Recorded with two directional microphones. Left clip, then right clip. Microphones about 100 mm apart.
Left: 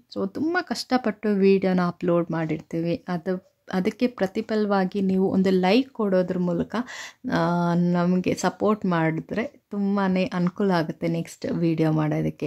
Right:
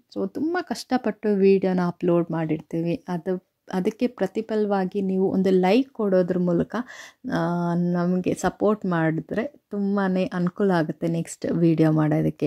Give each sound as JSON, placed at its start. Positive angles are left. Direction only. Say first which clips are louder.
{"t": 0.1, "sound": "speech", "louder": "left 1 dB", "side_deg": -30}
{"t": 6.8, "sound": "speech", "louder": "left 2 dB", "side_deg": -35}